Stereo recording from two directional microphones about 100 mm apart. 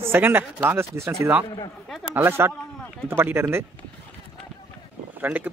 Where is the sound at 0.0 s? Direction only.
20° right (ahead or behind).